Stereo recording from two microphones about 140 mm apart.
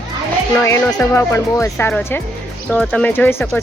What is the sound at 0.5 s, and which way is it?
Speech, 20° left (ahead or behind).